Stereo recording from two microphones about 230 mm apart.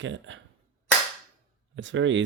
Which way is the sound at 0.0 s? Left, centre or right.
Right.